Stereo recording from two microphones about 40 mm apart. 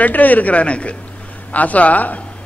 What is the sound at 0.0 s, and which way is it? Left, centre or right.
A man's voice, left.